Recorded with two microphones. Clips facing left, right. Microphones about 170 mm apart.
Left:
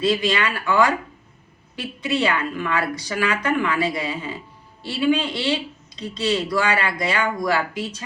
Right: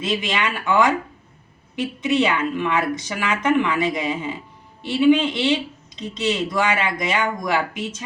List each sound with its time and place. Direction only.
0.0 s a woman's voice: 20° right (ahead or behind)